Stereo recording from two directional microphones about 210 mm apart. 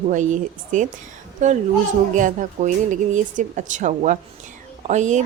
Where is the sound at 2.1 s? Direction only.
35° right (ahead or behind).